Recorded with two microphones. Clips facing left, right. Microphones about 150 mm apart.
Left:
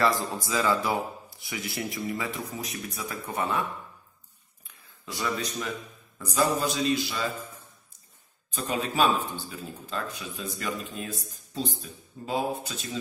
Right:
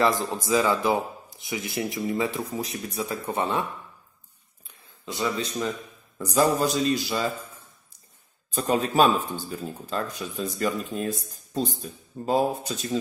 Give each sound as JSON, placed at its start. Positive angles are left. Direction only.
{"t": 0.0, "sound": "speech", "side_deg": -20}
{"t": 5.0, "sound": "speech", "side_deg": -20}
{"t": 6.1, "sound": "speech", "side_deg": -40}
{"t": 8.5, "sound": "speech", "side_deg": -40}